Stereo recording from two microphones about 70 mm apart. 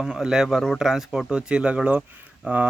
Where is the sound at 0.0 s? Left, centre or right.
Centre.